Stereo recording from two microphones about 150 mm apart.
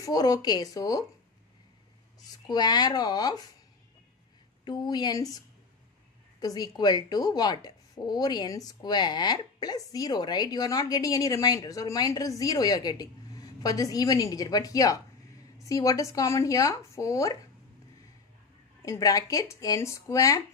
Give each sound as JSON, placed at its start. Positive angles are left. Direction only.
{"t": 0.0, "sound": "speech", "side_deg": 25}
{"t": 2.2, "sound": "speech", "side_deg": 25}
{"t": 4.6, "sound": "speech", "side_deg": 30}
{"t": 6.4, "sound": "speech", "side_deg": 25}
{"t": 18.9, "sound": "speech", "side_deg": 20}